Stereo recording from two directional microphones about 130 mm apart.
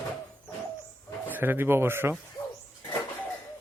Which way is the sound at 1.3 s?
15° right (ahead or behind).